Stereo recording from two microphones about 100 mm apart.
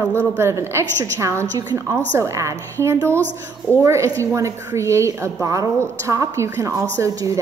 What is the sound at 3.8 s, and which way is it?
A woman's voice, 30° right (ahead or behind).